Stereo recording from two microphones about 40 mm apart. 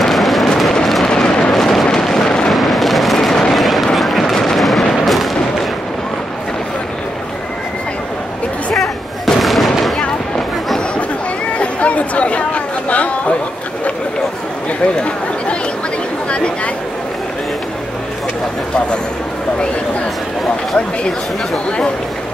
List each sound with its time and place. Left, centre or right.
0.0 s vehicle: centre
1.0 s vehicle: centre
1.5 s a sound: centre
2.5 s artillery fire: centre
9.2 s fireworks: centre
11.5 s chatter: left
16.3 s a sound: left